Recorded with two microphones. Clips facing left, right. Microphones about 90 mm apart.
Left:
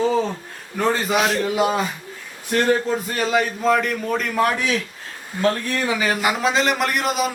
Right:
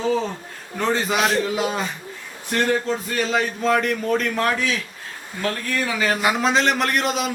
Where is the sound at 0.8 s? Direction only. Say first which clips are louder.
Left 1 dB; 5° left (ahead or behind).